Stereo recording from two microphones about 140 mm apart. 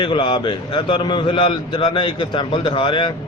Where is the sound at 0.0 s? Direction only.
35° left (ahead or behind).